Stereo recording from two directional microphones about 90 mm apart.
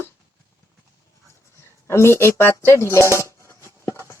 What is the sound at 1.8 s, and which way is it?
Speech, 30° left (ahead or behind).